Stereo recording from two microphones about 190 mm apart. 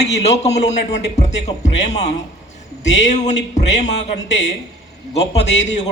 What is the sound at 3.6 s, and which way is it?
Speech, 40° left (ahead or behind).